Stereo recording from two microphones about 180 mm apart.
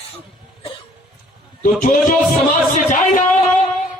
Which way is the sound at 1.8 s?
50° left (ahead or behind).